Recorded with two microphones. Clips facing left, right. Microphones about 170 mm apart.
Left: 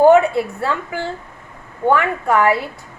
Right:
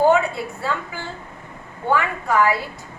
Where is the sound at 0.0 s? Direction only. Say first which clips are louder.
Left 6 dB; 55° left (ahead or behind).